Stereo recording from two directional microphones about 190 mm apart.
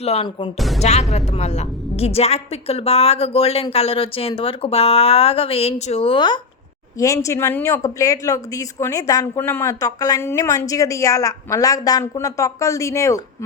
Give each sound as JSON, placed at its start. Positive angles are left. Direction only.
{"t": 0.0, "sound": "a woman's voice", "side_deg": 30}